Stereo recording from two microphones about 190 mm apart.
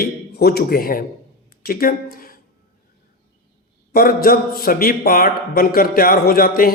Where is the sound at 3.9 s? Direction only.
50° left (ahead or behind).